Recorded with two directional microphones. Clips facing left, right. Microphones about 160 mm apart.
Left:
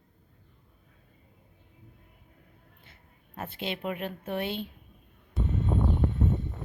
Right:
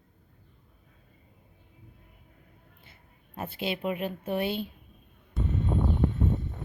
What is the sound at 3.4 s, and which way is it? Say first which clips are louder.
Speech: right 3 dB; 10° right (ahead or behind).